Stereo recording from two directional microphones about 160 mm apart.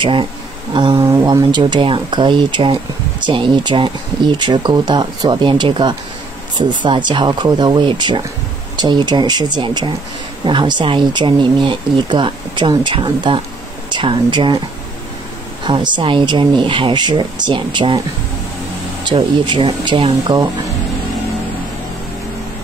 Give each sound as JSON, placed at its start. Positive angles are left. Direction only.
{"t": 0.0, "sound": "speech", "side_deg": -30}
{"t": 15.6, "sound": "speech", "side_deg": -30}
{"t": 19.0, "sound": "speech", "side_deg": -30}